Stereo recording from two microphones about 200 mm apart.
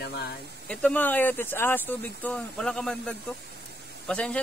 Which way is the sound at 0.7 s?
5° left (ahead or behind).